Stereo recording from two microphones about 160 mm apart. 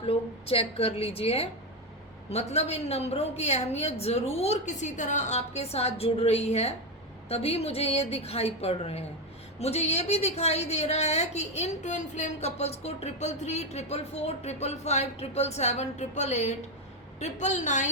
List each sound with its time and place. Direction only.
0.0 s a woman's voice: 35° left (ahead or behind)